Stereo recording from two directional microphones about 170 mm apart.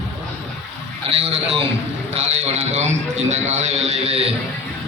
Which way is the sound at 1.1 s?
35° right (ahead or behind).